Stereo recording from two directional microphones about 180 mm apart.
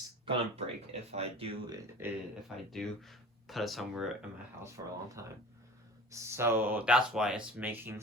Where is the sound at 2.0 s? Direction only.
10° right (ahead or behind).